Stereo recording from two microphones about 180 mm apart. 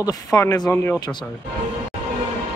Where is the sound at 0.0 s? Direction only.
15° left (ahead or behind).